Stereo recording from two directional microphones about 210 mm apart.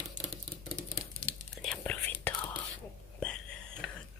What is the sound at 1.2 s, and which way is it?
Whispering, 5° left (ahead or behind).